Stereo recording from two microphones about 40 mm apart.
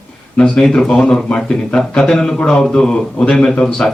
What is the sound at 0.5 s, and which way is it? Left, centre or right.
A man's voice, centre.